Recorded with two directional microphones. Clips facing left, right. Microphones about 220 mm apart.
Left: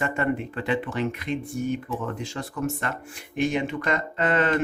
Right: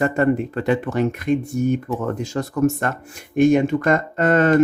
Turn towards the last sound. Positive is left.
turn(degrees=-45)  # may be behind; listen again after turning